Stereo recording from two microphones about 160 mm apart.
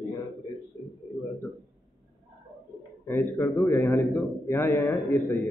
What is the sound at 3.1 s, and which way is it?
A man's voice, 15° left (ahead or behind).